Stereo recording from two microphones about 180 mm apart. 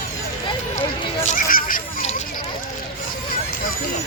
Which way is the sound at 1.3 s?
50° left (ahead or behind).